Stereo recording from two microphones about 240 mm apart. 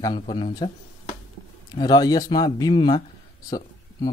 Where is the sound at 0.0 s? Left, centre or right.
Centre.